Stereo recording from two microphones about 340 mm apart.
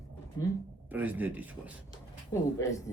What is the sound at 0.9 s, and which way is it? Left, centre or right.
Speech, centre.